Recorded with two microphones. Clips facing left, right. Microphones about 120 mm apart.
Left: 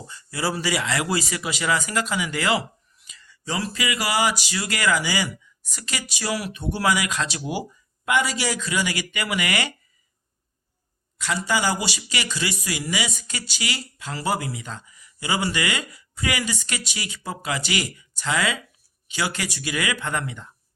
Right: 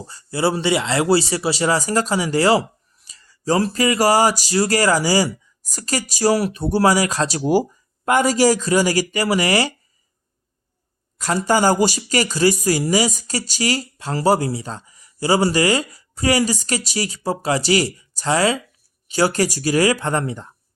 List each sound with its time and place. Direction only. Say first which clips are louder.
0.1 s speech: right 7 dB; 30° right (ahead or behind)
11.2 s speech: right 7 dB; 45° right (ahead or behind)